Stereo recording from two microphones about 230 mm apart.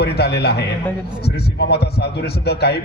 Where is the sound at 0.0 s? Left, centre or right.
Left.